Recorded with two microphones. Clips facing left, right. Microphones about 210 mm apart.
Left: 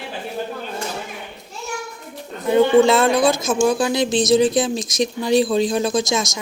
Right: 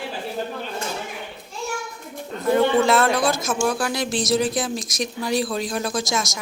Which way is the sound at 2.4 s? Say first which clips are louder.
Left 4 dB; 20° left (ahead or behind).